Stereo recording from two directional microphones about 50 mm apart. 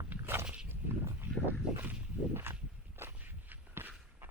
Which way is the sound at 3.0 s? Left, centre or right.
Right.